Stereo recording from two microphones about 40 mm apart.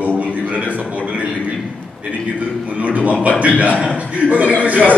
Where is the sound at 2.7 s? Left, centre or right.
Right.